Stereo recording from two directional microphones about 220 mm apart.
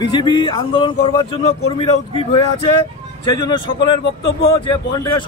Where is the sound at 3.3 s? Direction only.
20° left (ahead or behind).